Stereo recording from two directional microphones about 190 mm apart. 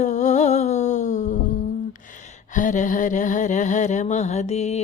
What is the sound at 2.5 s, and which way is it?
Mantra, 40° left (ahead or behind).